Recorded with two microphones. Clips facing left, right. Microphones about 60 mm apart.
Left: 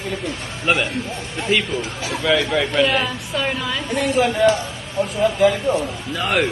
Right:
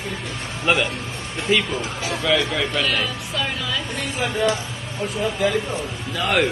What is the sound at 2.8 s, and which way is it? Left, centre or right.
Speech, left.